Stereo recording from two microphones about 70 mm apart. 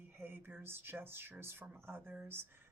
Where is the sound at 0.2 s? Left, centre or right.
Right.